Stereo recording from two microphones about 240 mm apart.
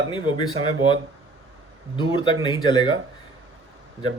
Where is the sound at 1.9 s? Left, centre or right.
Centre.